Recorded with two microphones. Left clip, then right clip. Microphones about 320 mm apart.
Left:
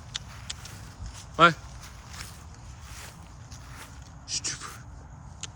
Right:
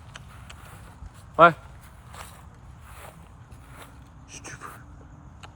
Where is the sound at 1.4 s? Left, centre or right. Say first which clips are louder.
Right 4 dB; centre.